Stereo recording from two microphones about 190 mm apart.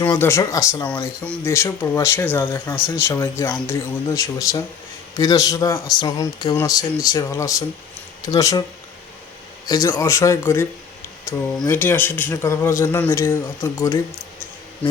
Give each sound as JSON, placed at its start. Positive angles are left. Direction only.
{"t": 0.0, "sound": "speech", "side_deg": 15}
{"t": 9.6, "sound": "speech", "side_deg": 20}